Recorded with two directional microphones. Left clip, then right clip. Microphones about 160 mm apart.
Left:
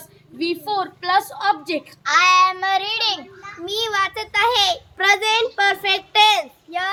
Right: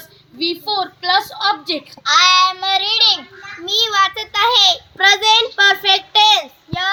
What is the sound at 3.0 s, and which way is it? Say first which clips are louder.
Speech: right 8 dB; 15° left (ahead or behind).